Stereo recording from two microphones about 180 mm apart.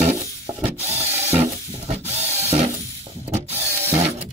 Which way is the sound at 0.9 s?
35° right (ahead or behind).